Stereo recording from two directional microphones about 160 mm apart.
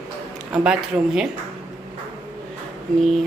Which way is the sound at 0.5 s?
5° right (ahead or behind).